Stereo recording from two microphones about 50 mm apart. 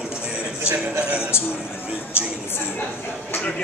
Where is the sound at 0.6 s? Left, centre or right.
Right.